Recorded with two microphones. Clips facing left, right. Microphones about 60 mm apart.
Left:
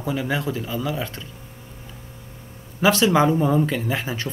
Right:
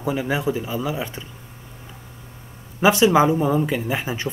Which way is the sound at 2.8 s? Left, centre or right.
Centre.